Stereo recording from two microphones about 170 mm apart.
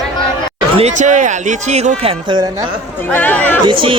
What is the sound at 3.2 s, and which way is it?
Speech, 10° left (ahead or behind).